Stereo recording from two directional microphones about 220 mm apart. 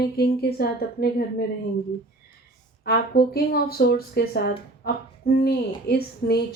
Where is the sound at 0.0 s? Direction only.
45° left (ahead or behind).